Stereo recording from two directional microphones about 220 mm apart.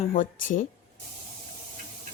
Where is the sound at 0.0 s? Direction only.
40° left (ahead or behind).